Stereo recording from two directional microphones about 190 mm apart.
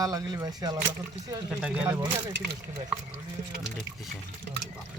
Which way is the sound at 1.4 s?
5° right (ahead or behind).